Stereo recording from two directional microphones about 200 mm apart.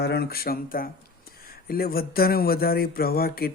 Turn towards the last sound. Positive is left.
turn(degrees=50)  # may be behind; listen again after turning